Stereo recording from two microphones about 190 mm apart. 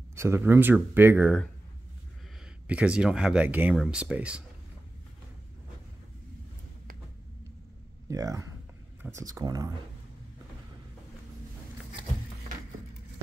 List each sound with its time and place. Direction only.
0.1 s speech: 15° right (ahead or behind)
2.6 s speech: 5° right (ahead or behind)
8.1 s speech: 15° right (ahead or behind)